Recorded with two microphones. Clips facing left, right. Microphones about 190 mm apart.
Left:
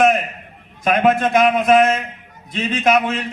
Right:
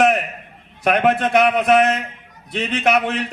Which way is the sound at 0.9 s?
65° right (ahead or behind).